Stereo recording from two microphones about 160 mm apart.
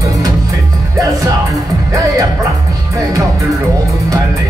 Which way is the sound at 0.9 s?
20° right (ahead or behind).